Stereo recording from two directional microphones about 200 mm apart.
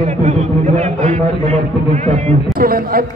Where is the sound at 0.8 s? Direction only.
30° right (ahead or behind).